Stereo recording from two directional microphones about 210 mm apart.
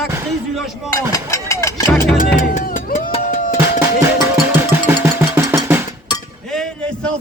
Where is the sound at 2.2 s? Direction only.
40° left (ahead or behind).